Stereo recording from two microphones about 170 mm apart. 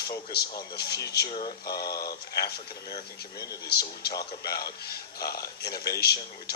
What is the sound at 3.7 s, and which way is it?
A man's voice, 70° left (ahead or behind).